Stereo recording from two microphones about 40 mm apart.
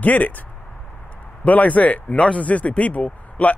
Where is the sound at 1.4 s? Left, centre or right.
Left.